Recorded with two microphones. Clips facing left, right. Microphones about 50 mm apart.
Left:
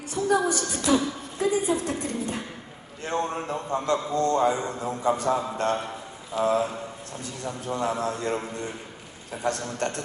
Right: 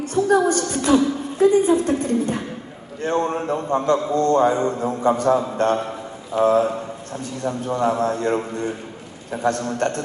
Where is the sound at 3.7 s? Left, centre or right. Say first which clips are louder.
Right 6 dB; right.